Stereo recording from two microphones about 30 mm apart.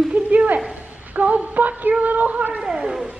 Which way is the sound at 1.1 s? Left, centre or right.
Right.